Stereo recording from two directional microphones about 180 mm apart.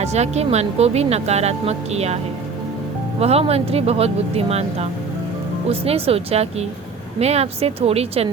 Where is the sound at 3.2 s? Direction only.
35° right (ahead or behind).